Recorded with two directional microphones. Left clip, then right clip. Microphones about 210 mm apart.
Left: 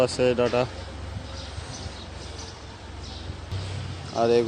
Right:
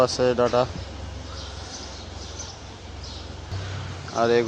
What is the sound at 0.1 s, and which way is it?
Speech, 25° left (ahead or behind).